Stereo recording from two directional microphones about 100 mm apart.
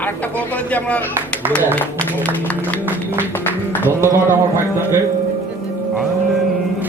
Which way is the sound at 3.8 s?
25° right (ahead or behind).